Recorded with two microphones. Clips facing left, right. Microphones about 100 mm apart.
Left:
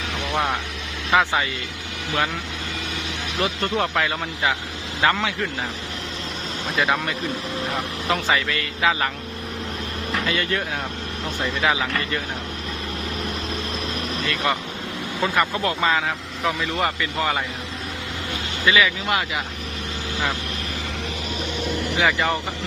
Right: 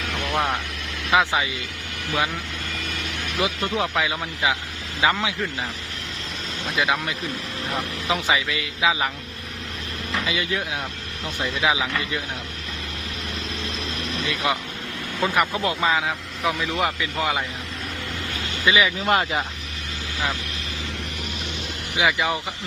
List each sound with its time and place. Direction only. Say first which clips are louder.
0.2 s vehicle: even; 10° left (ahead or behind)
1.1 s speech: left 1 dB; 5° right (ahead or behind)
3.3 s a man's voice: left 1 dB; 5° right (ahead or behind)
6.7 s a man's voice: left 1 dB; centre (ahead or behind)
10.1 s vehicle: left 2 dB; 5° right (ahead or behind)
11.3 s a man's voice: even; 5° right (ahead or behind)
14.3 s speech: left 1 dB; centre (ahead or behind)
18.6 s speech: left 1 dB; 20° right (ahead or behind)
19.0 s speech: right 3 dB; 35° right (ahead or behind)
21.9 s a man's voice: even; 5° right (ahead or behind)